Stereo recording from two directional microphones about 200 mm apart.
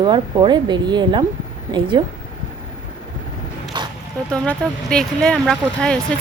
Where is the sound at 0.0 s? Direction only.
20° right (ahead or behind).